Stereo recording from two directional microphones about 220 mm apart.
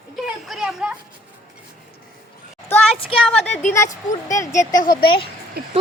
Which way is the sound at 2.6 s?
10° left (ahead or behind).